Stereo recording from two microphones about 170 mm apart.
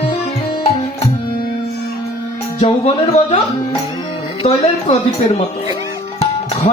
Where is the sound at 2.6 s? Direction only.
40° left (ahead or behind).